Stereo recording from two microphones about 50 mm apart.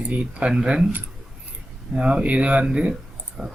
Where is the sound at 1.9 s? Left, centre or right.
Centre.